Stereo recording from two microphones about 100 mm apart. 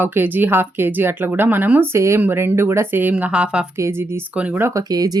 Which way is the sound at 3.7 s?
25° right (ahead or behind).